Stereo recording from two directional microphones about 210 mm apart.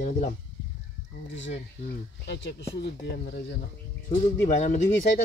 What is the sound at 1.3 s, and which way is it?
Speech, 60° left (ahead or behind).